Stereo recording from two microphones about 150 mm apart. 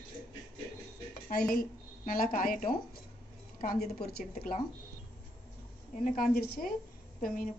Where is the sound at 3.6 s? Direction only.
70° left (ahead or behind).